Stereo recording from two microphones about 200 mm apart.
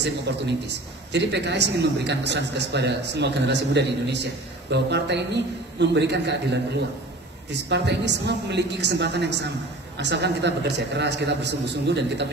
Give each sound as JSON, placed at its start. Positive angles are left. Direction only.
{"t": 0.3, "sound": "a man's voice", "side_deg": -55}
{"t": 7.7, "sound": "a man's voice", "side_deg": -60}